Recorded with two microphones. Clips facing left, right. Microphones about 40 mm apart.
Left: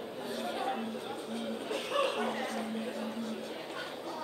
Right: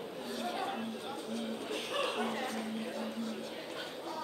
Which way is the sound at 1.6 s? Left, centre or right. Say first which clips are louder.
Left 5 dB; centre.